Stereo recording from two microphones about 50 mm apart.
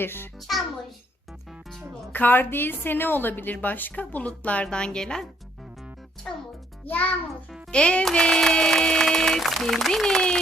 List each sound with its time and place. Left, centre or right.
0.0 s a child's voice: left
0.3 s a child's voice: centre
2.1 s a woman's voice: left
4.6 s music: centre
6.3 s music: centre
6.8 s a woman's voice: left
7.7 s music: centre